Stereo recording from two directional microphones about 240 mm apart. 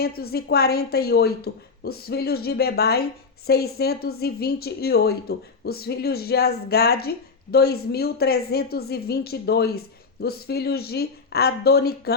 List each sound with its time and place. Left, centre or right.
0.0 s a woman's voice: left